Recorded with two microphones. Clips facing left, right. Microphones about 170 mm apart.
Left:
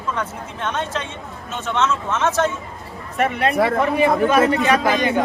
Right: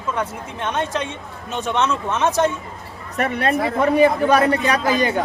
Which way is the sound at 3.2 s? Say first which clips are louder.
Left 2 dB; 35° right (ahead or behind).